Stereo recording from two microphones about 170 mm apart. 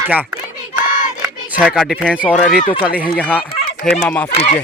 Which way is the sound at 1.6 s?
Centre (ahead or behind).